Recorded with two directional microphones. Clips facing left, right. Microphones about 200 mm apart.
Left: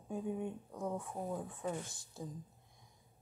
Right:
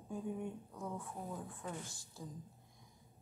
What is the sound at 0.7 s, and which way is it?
Speech, 35° left (ahead or behind).